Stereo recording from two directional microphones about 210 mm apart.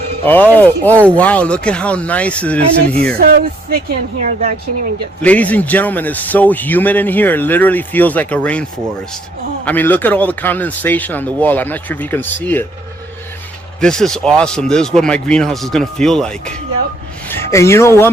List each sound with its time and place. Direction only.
0.3 s a man's voice: 10° left (ahead or behind)
3.2 s speech: 45° right (ahead or behind)
5.2 s a man's voice: 5° left (ahead or behind)
9.6 s a man's voice: 10° left (ahead or behind)
13.8 s a man's voice: 5° left (ahead or behind)